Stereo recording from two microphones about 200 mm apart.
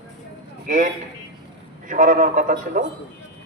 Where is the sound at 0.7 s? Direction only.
40° right (ahead or behind).